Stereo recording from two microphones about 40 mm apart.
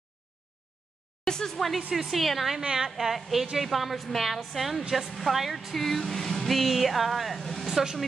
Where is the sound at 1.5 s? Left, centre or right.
Centre.